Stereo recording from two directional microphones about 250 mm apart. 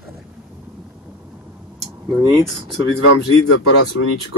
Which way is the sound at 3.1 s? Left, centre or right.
Left.